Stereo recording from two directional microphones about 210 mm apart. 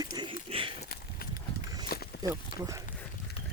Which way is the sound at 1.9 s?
45° left (ahead or behind).